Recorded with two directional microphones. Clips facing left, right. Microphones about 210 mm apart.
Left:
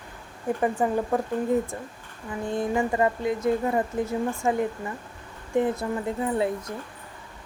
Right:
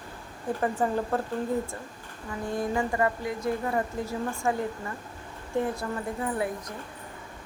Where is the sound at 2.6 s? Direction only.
20° left (ahead or behind).